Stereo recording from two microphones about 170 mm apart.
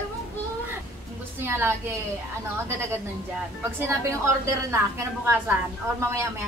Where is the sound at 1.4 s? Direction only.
15° right (ahead or behind).